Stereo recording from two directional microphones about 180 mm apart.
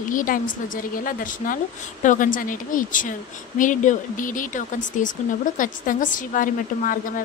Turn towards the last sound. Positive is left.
turn(degrees=50)  # may be behind; listen again after turning